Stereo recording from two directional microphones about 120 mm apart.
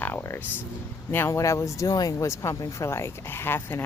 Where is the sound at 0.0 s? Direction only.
20° left (ahead or behind).